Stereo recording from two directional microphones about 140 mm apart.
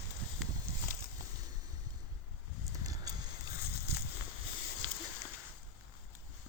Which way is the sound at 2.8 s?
25° right (ahead or behind).